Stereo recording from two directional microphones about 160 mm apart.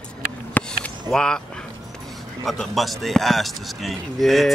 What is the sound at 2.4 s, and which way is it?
A man's voice, centre (ahead or behind).